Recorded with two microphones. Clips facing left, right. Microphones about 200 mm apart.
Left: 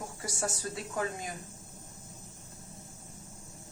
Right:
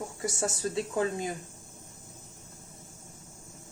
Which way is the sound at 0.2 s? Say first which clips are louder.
Right 5 dB; 25° right (ahead or behind).